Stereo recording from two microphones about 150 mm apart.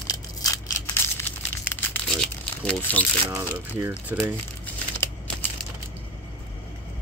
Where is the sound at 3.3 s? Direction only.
20° right (ahead or behind).